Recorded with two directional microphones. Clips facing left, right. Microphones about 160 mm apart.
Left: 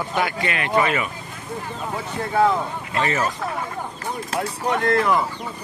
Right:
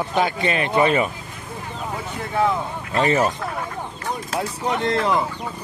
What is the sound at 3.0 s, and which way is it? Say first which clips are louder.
Speech: right 4 dB; 30° right (ahead or behind).